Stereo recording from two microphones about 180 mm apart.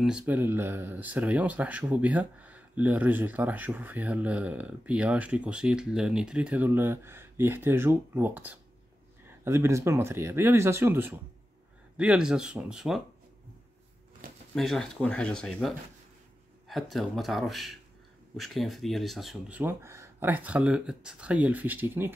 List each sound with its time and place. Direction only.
0.0 s speech: 5° right (ahead or behind)
14.5 s speech: centre (ahead or behind)